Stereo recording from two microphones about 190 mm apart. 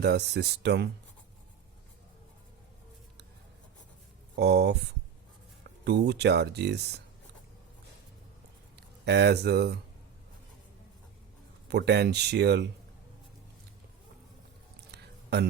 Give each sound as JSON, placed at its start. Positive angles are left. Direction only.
{"t": 0.0, "sound": "speech", "side_deg": -60}
{"t": 4.4, "sound": "speech", "side_deg": -60}
{"t": 9.0, "sound": "speech", "side_deg": -60}
{"t": 11.7, "sound": "speech", "side_deg": -60}
{"t": 14.9, "sound": "a sound", "side_deg": -60}